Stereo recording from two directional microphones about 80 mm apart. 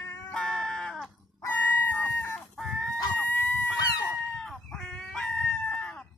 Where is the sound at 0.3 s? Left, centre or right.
Centre.